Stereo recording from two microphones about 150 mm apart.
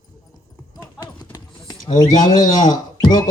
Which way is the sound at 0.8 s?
15° left (ahead or behind).